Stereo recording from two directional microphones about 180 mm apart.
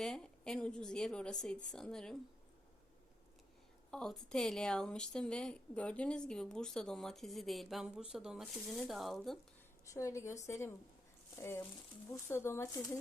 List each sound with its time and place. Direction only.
0.0 s speech: 5° left (ahead or behind)
3.9 s speech: 5° left (ahead or behind)
9.8 s a woman's voice: 20° left (ahead or behind)